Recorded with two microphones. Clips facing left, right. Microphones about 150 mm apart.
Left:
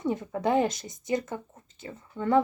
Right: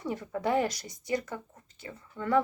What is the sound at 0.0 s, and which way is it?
Speech, 25° left (ahead or behind).